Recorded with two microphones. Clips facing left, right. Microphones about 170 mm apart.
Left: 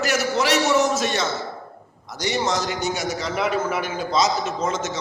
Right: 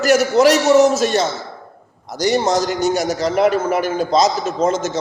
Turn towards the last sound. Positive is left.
turn(degrees=-40)  # may be behind; listen again after turning